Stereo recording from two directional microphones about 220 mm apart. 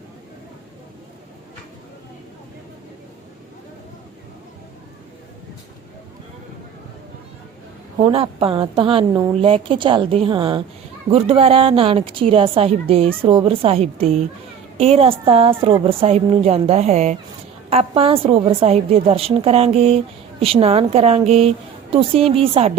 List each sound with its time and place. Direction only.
8.0 s a woman's voice: 25° right (ahead or behind)